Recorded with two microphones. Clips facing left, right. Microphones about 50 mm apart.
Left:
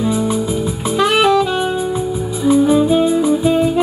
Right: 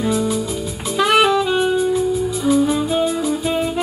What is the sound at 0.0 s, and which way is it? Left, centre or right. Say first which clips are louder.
Music: left 2 dB; centre.